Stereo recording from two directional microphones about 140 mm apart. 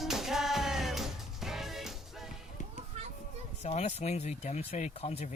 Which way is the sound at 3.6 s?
50° left (ahead or behind).